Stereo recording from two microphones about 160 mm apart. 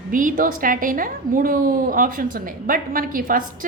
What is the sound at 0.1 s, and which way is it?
A woman's voice, 55° right (ahead or behind).